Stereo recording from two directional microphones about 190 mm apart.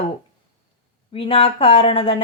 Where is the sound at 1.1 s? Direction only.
30° left (ahead or behind).